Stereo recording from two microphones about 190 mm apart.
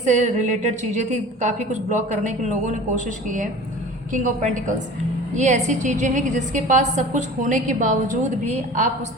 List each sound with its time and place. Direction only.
0.0 s a woman's voice: 40° right (ahead or behind)